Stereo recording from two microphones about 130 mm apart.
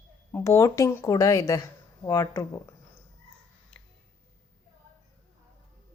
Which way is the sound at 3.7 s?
10° left (ahead or behind).